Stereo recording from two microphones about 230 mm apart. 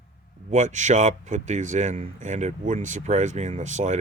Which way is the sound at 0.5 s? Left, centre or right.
Right.